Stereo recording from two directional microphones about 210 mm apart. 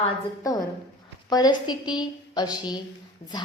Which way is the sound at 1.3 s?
20° left (ahead or behind).